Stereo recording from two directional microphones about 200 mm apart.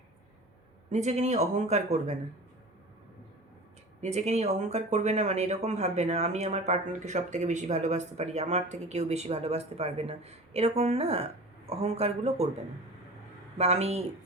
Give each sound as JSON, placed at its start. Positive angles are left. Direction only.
{"t": 0.9, "sound": "speech", "side_deg": -35}
{"t": 4.0, "sound": "speech", "side_deg": -35}
{"t": 13.6, "sound": "speech", "side_deg": -30}